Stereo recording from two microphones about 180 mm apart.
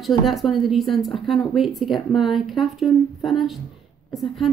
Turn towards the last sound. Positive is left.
turn(degrees=0)  # may be behind; listen again after turning